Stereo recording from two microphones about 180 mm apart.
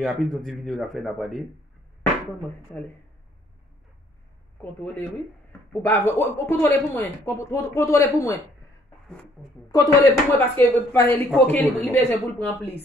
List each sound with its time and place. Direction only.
0.0 s speech: centre (ahead or behind)
5.5 s speech: 10° left (ahead or behind)
9.7 s speech: 20° left (ahead or behind)